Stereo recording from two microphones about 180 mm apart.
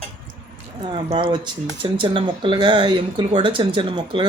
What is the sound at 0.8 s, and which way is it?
Speech, 25° right (ahead or behind).